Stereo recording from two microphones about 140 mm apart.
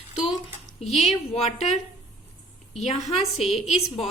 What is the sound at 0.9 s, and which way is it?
Speech, 50° left (ahead or behind).